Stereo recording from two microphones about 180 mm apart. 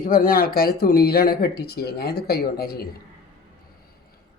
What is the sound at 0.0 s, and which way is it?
Speech, 50° left (ahead or behind).